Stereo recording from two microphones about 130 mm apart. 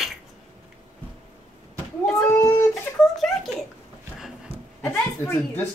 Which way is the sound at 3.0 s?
5° left (ahead or behind).